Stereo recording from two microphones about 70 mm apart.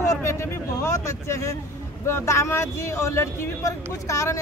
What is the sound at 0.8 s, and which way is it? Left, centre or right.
Speech, left.